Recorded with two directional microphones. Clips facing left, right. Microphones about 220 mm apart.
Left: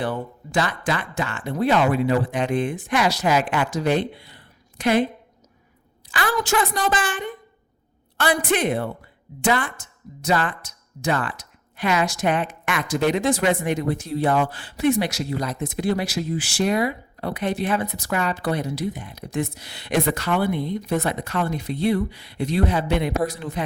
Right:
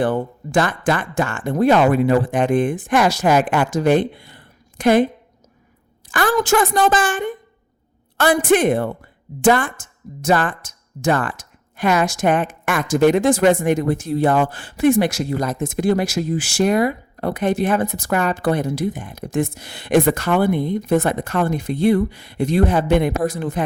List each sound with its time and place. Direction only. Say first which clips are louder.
0.0 s a woman's voice: right 7 dB; 50° right (ahead or behind)
6.1 s a woman's voice: right 6 dB; 45° right (ahead or behind)